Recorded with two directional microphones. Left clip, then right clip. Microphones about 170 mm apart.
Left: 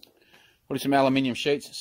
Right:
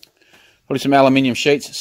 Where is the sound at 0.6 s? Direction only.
Centre (ahead or behind).